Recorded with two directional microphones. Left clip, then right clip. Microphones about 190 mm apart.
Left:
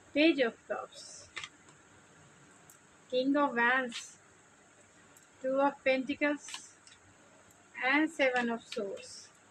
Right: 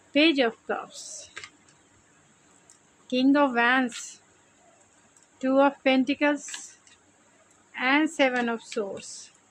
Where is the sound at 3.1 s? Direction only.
60° right (ahead or behind).